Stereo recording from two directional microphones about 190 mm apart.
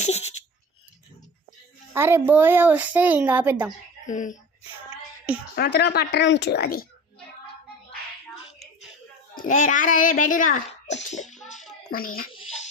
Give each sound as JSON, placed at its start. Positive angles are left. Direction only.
{"t": 0.0, "sound": "a sound", "side_deg": 35}
{"t": 1.9, "sound": "a child's voice", "side_deg": -10}
{"t": 4.0, "sound": "speech", "side_deg": 40}
{"t": 5.5, "sound": "speech", "side_deg": 60}
{"t": 9.3, "sound": "a child's voice", "side_deg": 45}
{"t": 11.1, "sound": "a sound", "side_deg": 40}
{"t": 11.9, "sound": "a child's voice", "side_deg": 50}